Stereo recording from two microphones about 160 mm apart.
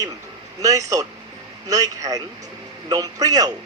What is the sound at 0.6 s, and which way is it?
A man's voice, 20° right (ahead or behind).